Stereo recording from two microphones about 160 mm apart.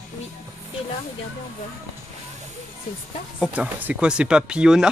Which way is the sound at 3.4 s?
10° right (ahead or behind).